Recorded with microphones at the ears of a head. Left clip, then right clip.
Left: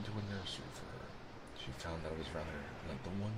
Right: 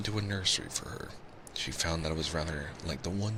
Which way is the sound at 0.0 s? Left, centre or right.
Right.